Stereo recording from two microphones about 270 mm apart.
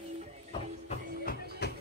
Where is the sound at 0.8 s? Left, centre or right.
Left.